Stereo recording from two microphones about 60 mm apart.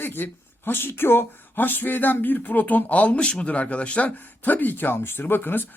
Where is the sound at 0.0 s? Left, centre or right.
Left.